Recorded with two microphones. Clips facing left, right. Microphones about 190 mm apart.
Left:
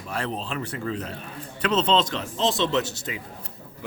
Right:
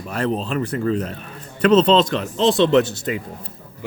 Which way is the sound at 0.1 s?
45° right (ahead or behind).